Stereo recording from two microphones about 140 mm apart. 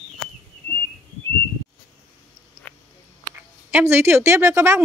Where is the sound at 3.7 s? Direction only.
15° right (ahead or behind).